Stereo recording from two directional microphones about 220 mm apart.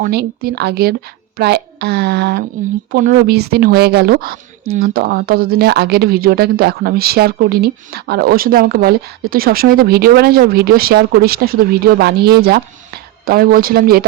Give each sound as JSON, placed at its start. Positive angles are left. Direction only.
{"t": 0.0, "sound": "speech", "side_deg": -45}